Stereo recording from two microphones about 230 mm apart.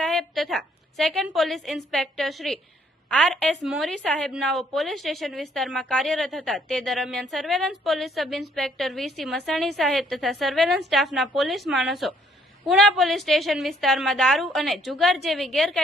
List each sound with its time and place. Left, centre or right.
0.0 s a woman's voice: centre